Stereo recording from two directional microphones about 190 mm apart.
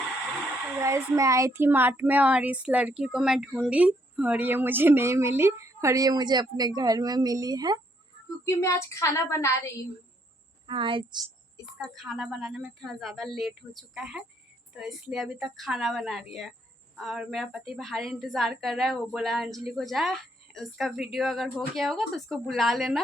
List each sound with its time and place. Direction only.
0.8 s speech: 15° right (ahead or behind)
8.4 s a woman's voice: 15° left (ahead or behind)
10.7 s a woman's voice: 25° right (ahead or behind)
11.6 s a woman's voice: centre (ahead or behind)